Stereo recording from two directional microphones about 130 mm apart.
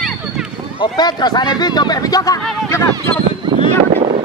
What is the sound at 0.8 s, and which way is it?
Speech, 35° left (ahead or behind).